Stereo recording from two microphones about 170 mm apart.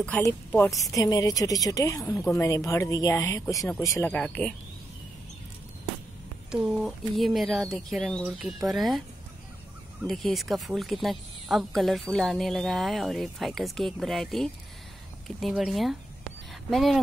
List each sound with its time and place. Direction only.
0.2 s a woman's voice: 15° left (ahead or behind)
4.1 s speech: 5° left (ahead or behind)
6.5 s speech: centre (ahead or behind)
10.0 s speech: centre (ahead or behind)